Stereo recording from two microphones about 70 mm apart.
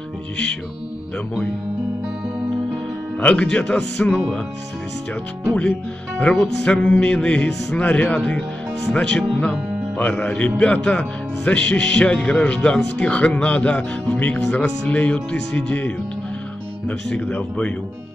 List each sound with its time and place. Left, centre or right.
3.2 s speech: centre
5.5 s speech: centre